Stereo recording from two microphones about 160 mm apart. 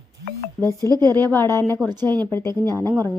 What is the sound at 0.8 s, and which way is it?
Speech, 25° right (ahead or behind).